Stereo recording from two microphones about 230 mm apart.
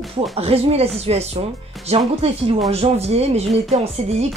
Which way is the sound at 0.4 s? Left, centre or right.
Right.